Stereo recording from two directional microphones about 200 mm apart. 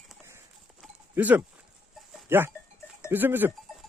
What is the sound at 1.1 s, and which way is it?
Speech, 10° right (ahead or behind).